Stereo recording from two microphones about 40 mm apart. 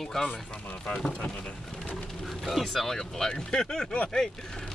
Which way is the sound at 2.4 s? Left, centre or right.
Centre.